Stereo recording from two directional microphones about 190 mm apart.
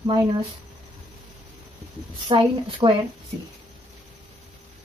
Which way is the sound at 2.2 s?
25° right (ahead or behind).